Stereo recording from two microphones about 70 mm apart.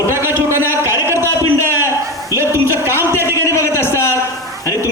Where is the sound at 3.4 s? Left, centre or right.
Left.